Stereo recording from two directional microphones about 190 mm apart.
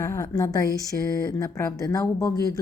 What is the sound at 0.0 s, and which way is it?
Speech, 15° left (ahead or behind).